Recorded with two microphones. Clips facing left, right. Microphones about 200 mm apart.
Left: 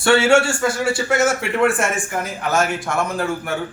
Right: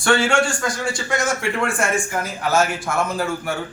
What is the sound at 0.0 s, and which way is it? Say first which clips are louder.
A man's voice: left 4 dB; 5° left (ahead or behind).